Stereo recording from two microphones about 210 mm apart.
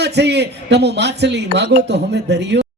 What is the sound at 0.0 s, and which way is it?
A man's voice, 55° right (ahead or behind).